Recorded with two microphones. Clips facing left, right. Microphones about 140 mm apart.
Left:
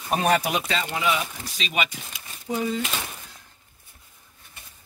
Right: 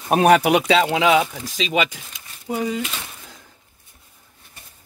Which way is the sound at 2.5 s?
15° right (ahead or behind).